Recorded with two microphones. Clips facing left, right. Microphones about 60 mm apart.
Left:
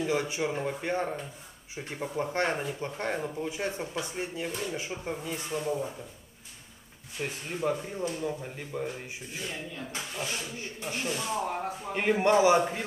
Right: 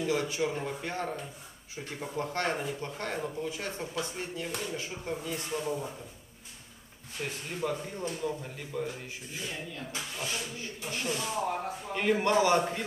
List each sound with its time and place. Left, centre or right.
0.0 s speech: centre
7.2 s speech: centre
11.1 s speech: centre
11.9 s speech: centre